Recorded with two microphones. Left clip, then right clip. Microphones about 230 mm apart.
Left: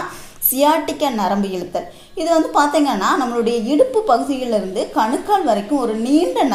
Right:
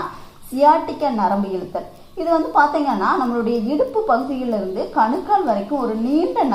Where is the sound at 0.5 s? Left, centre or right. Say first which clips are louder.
Right 1 dB; left.